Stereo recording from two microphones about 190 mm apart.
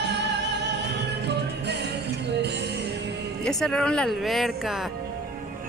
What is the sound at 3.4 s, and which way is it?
Speech, centre (ahead or behind).